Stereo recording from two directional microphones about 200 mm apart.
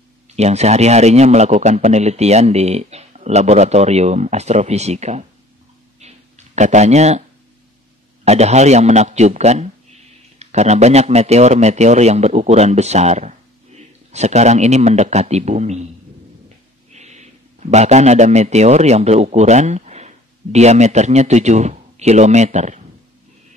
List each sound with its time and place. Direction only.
0.4 s a man's voice: 35° right (ahead or behind)
5.9 s a sound: 35° right (ahead or behind)
8.3 s a man's voice: 35° right (ahead or behind)
16.9 s a man's voice: 35° right (ahead or behind)